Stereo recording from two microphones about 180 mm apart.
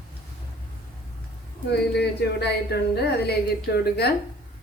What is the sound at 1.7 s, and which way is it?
Speech, 65° left (ahead or behind).